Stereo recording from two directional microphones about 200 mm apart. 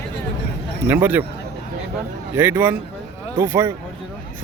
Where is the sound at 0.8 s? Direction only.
10° right (ahead or behind).